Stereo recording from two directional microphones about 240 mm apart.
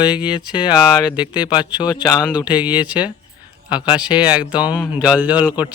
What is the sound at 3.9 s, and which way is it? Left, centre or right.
Speech, centre.